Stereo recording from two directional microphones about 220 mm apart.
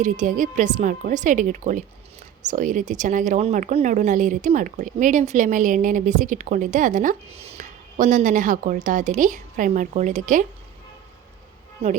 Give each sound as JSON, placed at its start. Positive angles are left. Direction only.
{"t": 0.0, "sound": "speech", "side_deg": -35}